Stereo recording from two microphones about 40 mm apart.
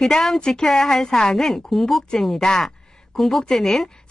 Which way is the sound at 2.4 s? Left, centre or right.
Centre.